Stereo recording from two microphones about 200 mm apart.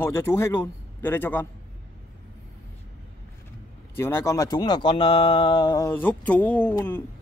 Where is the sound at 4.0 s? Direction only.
10° left (ahead or behind).